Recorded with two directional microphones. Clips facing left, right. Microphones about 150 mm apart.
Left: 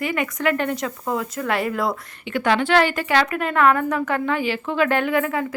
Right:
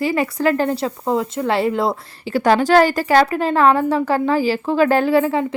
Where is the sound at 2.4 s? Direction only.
40° right (ahead or behind).